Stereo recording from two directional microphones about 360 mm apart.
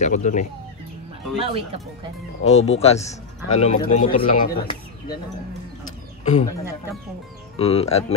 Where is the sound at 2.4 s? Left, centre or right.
Centre.